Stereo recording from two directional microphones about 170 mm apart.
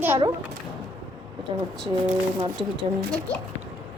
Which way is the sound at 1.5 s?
30° right (ahead or behind).